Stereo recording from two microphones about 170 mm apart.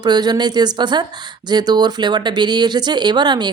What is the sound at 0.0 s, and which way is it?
Speech, 25° right (ahead or behind).